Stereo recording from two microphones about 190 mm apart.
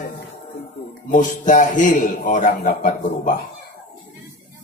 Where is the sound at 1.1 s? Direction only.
45° left (ahead or behind).